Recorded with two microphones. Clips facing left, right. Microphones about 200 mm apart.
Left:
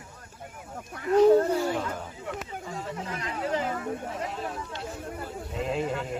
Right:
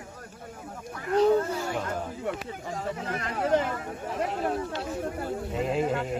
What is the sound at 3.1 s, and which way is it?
Speech, 55° right (ahead or behind).